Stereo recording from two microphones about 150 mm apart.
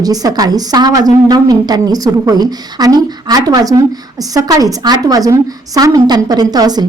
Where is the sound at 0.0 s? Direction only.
25° right (ahead or behind).